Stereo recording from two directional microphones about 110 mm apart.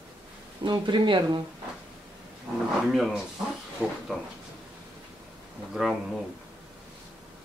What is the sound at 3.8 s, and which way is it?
Speech, 10° right (ahead or behind).